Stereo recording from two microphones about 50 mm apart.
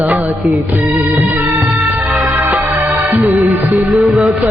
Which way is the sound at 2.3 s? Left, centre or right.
Right.